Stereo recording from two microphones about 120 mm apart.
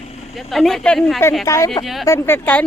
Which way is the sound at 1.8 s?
Centre (ahead or behind).